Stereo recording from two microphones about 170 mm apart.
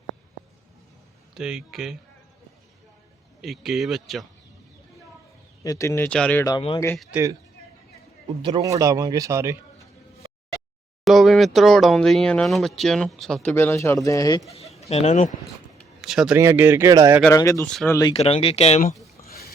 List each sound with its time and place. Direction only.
1.3 s speech: 5° right (ahead or behind)
3.4 s speech: centre (ahead or behind)
5.6 s speech: 20° left (ahead or behind); by 7.2 s centre (ahead or behind)
8.4 s speech: 30° right (ahead or behind)
8.6 s speech: 20° right (ahead or behind)
11.0 s speech: centre (ahead or behind); by 14.4 s 20° left (ahead or behind)
14.5 s speech: 35° left (ahead or behind)
16.0 s speech: 5° right (ahead or behind)
16.4 s speech: 15° right (ahead or behind)
17.3 s speech: 20° left (ahead or behind)
18.1 s speech: 35° left (ahead or behind)